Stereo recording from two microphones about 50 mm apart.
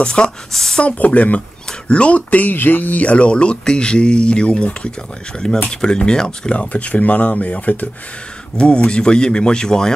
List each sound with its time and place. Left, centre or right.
0.0 s speech: centre
0.5 s speech: centre
0.8 s speech: left
5.7 s speech: centre
6.5 s speech: left
8.5 s speech: left